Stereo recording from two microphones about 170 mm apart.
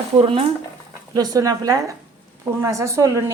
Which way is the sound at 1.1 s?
20° right (ahead or behind).